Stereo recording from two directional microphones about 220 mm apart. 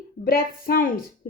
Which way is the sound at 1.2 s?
40° left (ahead or behind).